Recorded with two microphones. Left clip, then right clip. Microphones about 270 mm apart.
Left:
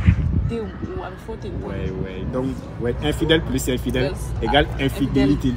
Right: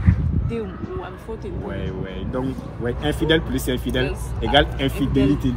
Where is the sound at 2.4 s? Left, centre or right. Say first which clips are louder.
Left 1 dB; centre.